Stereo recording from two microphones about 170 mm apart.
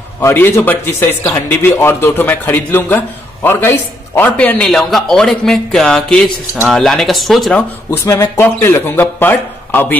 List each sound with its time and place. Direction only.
0.2 s a man's voice: 15° left (ahead or behind)
7.9 s speech: 15° left (ahead or behind)